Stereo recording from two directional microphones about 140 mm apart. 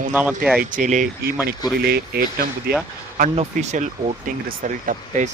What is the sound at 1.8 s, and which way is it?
Speech, 90° right.